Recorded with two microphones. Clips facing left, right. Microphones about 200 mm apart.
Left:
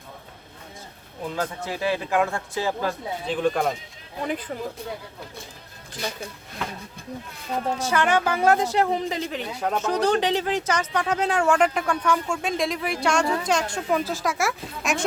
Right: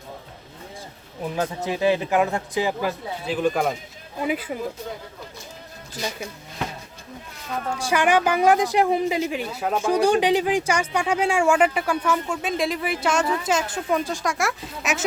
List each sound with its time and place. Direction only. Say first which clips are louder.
1.2 s speech: right 3 dB; 15° right (ahead or behind)
7.9 s speech: right 3 dB; 15° right (ahead or behind)